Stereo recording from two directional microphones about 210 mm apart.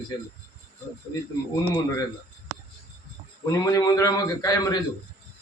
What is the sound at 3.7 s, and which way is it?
Speech, 15° left (ahead or behind).